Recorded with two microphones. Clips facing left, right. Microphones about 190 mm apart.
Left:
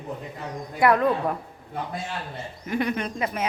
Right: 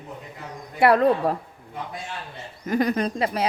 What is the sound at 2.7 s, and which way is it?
Speech, 40° right (ahead or behind).